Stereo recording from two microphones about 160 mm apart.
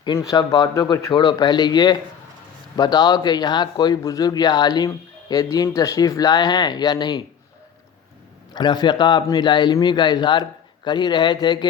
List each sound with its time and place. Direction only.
0.2 s a man's voice: 25° left (ahead or behind)
8.5 s a man's voice: 25° left (ahead or behind)